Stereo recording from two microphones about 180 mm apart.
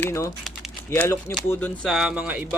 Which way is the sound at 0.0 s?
15° left (ahead or behind).